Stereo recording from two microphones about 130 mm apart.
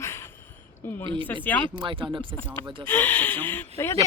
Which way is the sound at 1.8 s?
40° right (ahead or behind).